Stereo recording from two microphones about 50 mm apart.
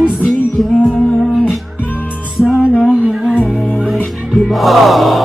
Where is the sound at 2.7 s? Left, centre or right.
Left.